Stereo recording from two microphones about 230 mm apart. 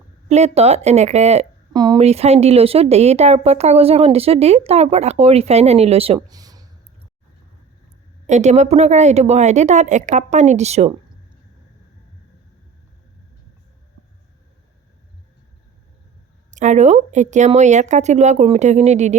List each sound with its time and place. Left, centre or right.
0.3 s a woman's voice: right
1.7 s a woman's voice: centre
8.3 s a woman's voice: right
16.5 s speech: right